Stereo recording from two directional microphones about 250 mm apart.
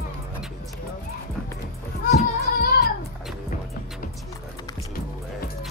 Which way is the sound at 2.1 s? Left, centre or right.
Left.